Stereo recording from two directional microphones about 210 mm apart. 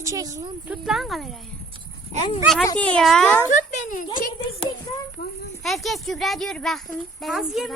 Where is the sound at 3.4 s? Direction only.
35° left (ahead or behind).